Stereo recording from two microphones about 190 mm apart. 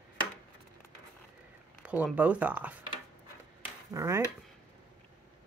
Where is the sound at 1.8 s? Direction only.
5° right (ahead or behind).